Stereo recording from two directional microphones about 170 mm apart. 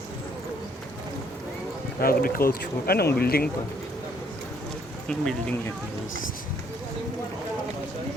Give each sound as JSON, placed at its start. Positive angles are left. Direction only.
{"t": 2.0, "sound": "speech", "side_deg": 60}
{"t": 5.0, "sound": "speech", "side_deg": 5}